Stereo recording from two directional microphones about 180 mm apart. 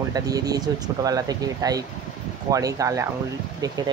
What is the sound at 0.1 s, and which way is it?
Speech, 20° right (ahead or behind).